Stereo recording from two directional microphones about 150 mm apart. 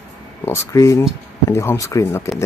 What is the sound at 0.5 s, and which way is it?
Speech, 20° left (ahead or behind).